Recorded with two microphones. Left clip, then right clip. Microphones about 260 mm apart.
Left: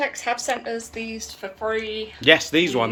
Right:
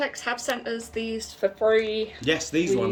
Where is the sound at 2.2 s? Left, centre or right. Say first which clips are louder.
Left 9 dB; centre.